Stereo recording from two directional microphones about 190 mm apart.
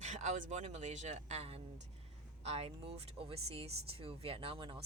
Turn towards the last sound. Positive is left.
turn(degrees=-25)  # may be behind; listen again after turning